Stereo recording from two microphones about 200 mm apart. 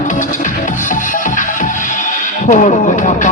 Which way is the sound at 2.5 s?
40° left (ahead or behind).